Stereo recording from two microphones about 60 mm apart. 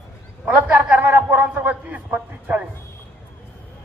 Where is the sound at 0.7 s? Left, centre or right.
Right.